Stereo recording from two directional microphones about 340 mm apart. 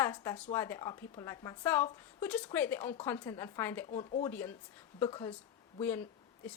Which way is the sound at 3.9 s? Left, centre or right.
Left.